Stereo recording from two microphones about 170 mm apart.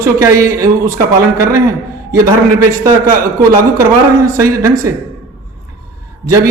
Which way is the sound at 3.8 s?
15° right (ahead or behind).